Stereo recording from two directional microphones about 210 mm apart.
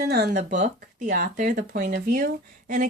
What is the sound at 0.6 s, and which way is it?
Speech, 40° right (ahead or behind).